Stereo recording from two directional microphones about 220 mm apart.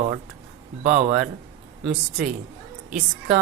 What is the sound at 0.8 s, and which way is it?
Speech, 30° right (ahead or behind).